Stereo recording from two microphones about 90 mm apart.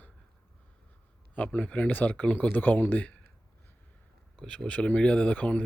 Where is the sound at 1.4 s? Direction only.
20° left (ahead or behind).